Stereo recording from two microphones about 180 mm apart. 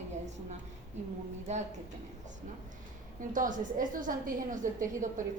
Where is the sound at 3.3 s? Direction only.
50° right (ahead or behind).